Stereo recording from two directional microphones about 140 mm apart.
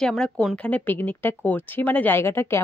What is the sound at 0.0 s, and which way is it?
Speech, 5° left (ahead or behind).